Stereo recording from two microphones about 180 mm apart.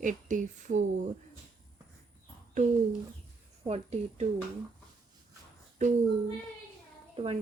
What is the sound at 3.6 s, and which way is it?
Speech, 35° right (ahead or behind).